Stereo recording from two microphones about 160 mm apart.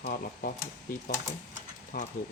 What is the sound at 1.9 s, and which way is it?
Speech, 60° left (ahead or behind).